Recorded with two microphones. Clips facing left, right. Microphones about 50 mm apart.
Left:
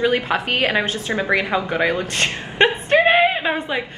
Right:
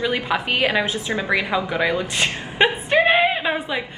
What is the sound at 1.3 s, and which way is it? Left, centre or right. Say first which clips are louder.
Speech: left 1 dB; centre.